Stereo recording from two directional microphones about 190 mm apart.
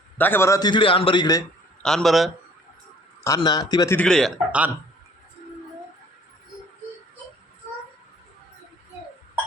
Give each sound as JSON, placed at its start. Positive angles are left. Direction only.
{"t": 0.2, "sound": "a man's voice", "side_deg": 10}
{"t": 1.8, "sound": "a man's voice", "side_deg": 0}
{"t": 3.2, "sound": "a man's voice", "side_deg": 20}
{"t": 4.0, "sound": "a man's voice", "side_deg": 0}